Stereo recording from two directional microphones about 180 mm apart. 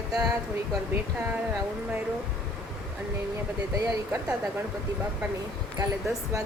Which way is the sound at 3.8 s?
15° right (ahead or behind).